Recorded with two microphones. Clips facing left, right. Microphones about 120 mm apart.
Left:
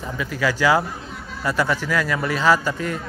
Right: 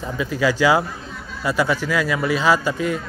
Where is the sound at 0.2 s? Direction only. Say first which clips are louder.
Right 3 dB; 20° right (ahead or behind).